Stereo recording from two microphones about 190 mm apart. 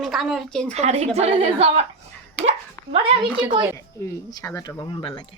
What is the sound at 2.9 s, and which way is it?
Speech, 30° right (ahead or behind).